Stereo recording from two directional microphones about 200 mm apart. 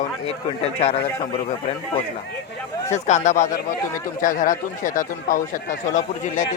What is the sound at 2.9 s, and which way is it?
Speech, 35° left (ahead or behind).